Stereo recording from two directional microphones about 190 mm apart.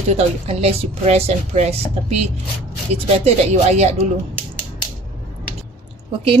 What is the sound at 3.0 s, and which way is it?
Speech, 35° right (ahead or behind).